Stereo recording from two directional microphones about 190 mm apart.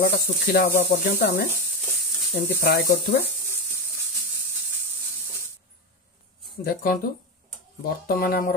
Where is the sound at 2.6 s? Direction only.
55° left (ahead or behind).